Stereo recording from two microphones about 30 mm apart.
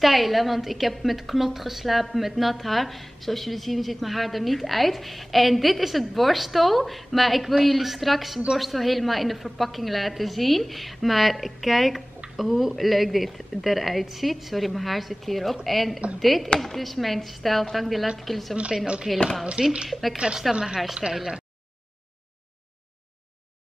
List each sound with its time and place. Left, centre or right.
0.0 s a woman's voice: centre
19.6 s a woman's voice: right
19.9 s a woman's voice: centre
20.9 s speech: centre